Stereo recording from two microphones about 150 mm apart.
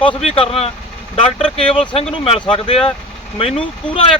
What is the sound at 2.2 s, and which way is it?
Speech, 40° left (ahead or behind).